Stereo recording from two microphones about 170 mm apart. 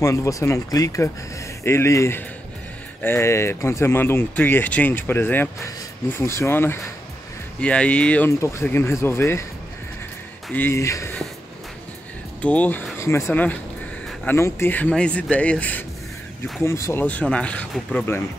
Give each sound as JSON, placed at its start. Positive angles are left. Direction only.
{"t": 0.0, "sound": "speech", "side_deg": 20}
{"t": 10.5, "sound": "speech", "side_deg": 15}
{"t": 12.4, "sound": "speech", "side_deg": 10}